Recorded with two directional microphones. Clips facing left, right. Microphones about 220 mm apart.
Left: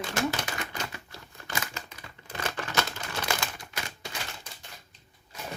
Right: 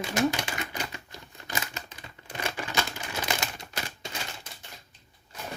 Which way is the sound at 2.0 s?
20° right (ahead or behind).